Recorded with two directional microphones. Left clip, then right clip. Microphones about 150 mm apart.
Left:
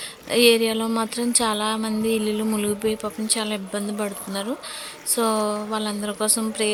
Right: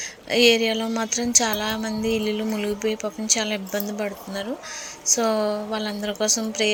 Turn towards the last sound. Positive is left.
turn(degrees=15)  # may be behind; listen again after turning